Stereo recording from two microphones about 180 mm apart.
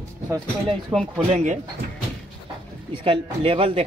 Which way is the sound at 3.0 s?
30° right (ahead or behind).